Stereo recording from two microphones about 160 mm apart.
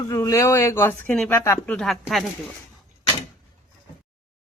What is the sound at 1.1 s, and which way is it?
Speech, 10° left (ahead or behind).